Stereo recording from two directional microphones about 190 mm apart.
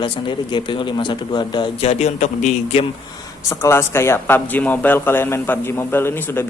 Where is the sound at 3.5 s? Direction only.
15° left (ahead or behind).